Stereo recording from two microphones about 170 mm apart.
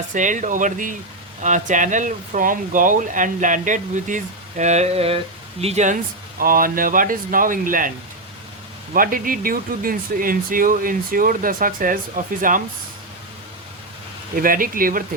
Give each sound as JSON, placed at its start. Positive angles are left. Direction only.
{"t": 0.1, "sound": "speech", "side_deg": -50}
{"t": 6.4, "sound": "speech", "side_deg": -55}
{"t": 14.3, "sound": "speech", "side_deg": -55}